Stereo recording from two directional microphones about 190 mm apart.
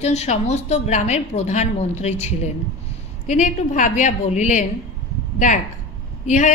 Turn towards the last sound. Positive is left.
turn(degrees=40)  # may be behind; listen again after turning